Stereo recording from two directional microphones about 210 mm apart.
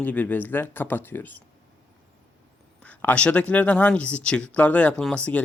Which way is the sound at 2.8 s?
5° left (ahead or behind).